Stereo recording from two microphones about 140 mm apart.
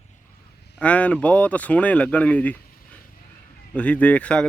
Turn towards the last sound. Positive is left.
turn(degrees=10)  # may be behind; listen again after turning